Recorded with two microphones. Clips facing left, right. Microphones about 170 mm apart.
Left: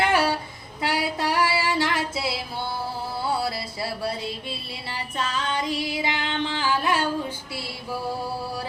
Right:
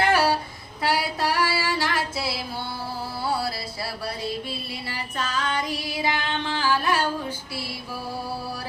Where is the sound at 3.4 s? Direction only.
20° left (ahead or behind).